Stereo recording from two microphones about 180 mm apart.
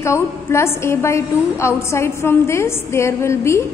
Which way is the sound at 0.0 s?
15° left (ahead or behind).